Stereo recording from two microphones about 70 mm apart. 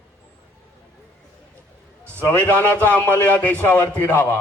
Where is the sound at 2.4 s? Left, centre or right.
Left.